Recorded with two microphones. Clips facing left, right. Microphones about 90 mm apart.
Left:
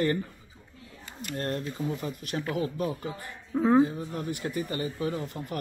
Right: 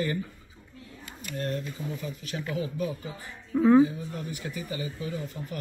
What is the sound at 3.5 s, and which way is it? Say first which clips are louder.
Speech: right 3 dB; 25° left (ahead or behind).